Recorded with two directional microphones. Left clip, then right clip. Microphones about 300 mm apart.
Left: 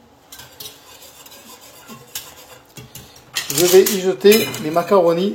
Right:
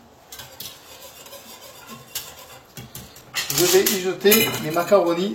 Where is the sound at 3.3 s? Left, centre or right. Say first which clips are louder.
Left 5 dB; left.